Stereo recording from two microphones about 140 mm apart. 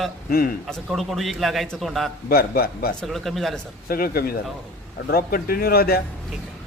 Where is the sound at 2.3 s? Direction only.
90° left.